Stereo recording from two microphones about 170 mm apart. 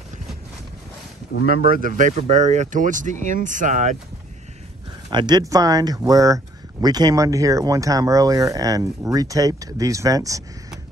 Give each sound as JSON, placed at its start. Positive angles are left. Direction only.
{"t": 1.5, "sound": "speech", "side_deg": -55}
{"t": 5.1, "sound": "speech", "side_deg": -25}